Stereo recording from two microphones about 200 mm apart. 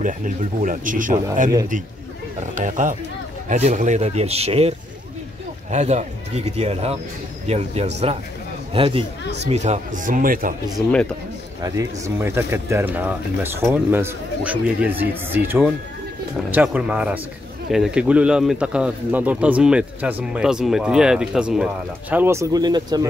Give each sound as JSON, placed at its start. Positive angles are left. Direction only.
{"t": 0.0, "sound": "speech", "side_deg": -40}
{"t": 2.5, "sound": "speech", "side_deg": -40}
{"t": 11.6, "sound": "a man's voice", "side_deg": -15}